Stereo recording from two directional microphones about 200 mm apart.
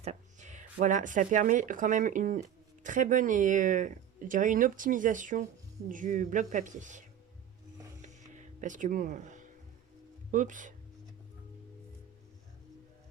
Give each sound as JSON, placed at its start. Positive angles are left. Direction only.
{"t": 0.0, "sound": "speech", "side_deg": -35}
{"t": 8.0, "sound": "music", "side_deg": -40}
{"t": 10.3, "sound": "speech", "side_deg": -40}